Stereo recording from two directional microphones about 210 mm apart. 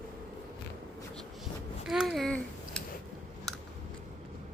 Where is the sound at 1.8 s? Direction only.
Centre (ahead or behind).